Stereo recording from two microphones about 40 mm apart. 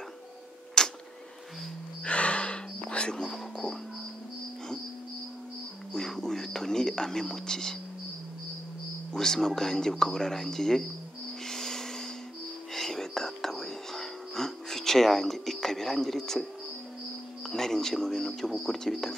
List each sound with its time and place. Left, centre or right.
0.8 s a sound: centre
2.0 s music: left
5.9 s speech: centre
9.1 s speech: centre
11.4 s a sound: centre
12.7 s whispering: centre
17.5 s speech: centre